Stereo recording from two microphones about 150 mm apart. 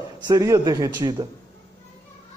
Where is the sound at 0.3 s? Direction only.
25° right (ahead or behind).